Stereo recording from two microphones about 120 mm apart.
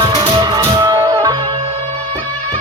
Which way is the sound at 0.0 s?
35° right (ahead or behind).